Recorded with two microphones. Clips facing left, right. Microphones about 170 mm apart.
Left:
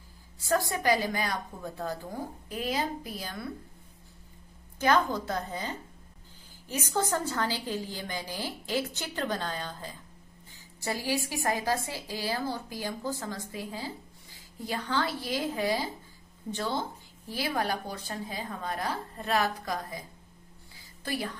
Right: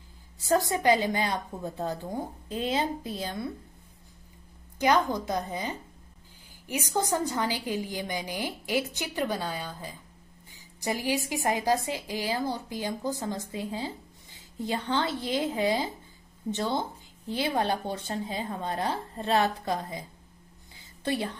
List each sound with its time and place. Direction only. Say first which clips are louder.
0.4 s a woman's voice: right 3 dB; 20° right (ahead or behind)
4.7 s a woman's voice: right 1 dB; 15° right (ahead or behind)